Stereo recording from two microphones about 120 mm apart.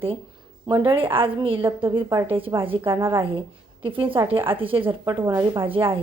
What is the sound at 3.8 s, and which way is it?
Speech, 45° right (ahead or behind).